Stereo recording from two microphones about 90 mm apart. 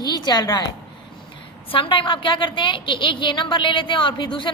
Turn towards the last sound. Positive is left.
turn(degrees=65)  # may be behind; listen again after turning